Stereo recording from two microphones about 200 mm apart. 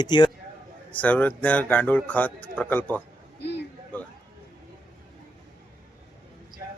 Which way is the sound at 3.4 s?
60° left (ahead or behind).